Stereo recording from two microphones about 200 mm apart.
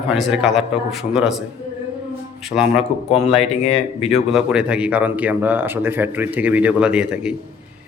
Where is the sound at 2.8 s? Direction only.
35° left (ahead or behind).